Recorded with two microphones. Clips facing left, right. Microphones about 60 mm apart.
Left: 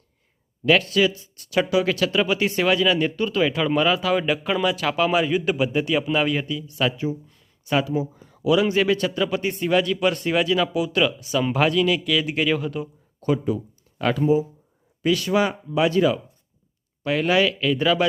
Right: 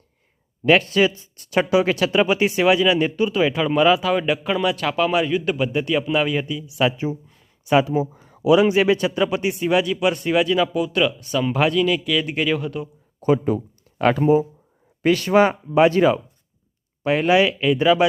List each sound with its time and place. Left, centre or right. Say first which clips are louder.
0.6 s a man's voice: right 2 dB; right; by 6.8 s centre
6.8 s a man's voice: right 3 dB; right; by 12.9 s centre
13.2 s speech: right 4 dB; centre
14.0 s speech: right 3 dB; right
17.0 s speech: right 3 dB; right